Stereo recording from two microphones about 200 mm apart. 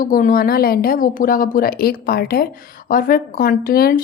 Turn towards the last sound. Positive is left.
turn(degrees=50)  # may be behind; listen again after turning